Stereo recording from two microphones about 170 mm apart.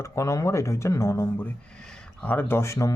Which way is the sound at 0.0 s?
15° left (ahead or behind).